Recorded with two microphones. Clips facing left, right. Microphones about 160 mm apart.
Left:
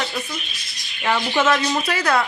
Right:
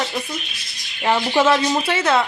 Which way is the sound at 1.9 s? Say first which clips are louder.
Right 2 dB; 25° right (ahead or behind).